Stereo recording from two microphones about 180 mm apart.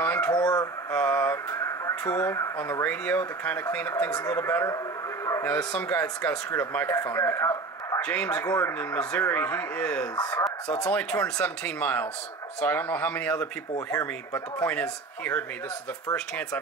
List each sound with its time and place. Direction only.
0.0 s a sound: 10° left (ahead or behind)
0.3 s speech: 20° left (ahead or behind)
0.9 s speech: 10° left (ahead or behind)